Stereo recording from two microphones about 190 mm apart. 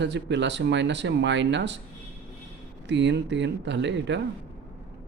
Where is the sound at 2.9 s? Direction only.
70° right (ahead or behind).